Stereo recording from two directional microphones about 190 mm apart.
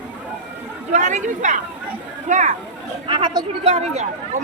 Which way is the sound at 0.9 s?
40° right (ahead or behind).